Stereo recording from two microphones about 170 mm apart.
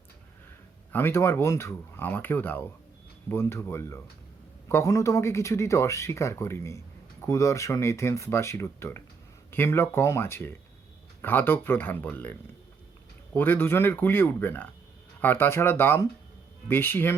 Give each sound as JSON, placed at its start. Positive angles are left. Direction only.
{"t": 0.9, "sound": "speech", "side_deg": 15}